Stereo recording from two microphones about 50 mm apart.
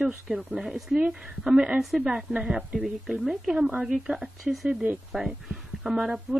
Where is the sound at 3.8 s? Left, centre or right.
Centre.